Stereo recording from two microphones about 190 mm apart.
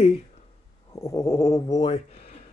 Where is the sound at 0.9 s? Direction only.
15° left (ahead or behind); by 2.4 s 35° left (ahead or behind).